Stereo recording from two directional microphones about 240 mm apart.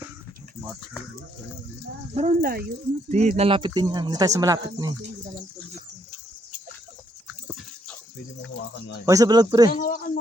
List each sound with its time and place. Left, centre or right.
2.1 s speech: right
3.2 s speech: right
7.4 s dog: centre
9.0 s speech: centre
9.7 s speech: left